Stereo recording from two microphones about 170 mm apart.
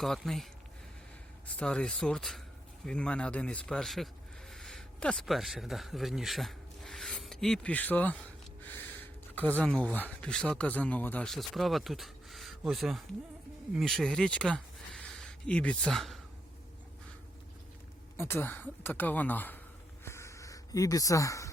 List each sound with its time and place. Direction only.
0.0 s speech: centre (ahead or behind)
1.5 s speech: 5° left (ahead or behind)
18.2 s speech: 10° left (ahead or behind)
20.1 s a sound: 15° left (ahead or behind)